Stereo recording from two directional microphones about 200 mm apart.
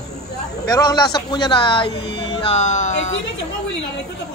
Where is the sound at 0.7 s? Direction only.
20° left (ahead or behind); by 3.2 s 35° left (ahead or behind).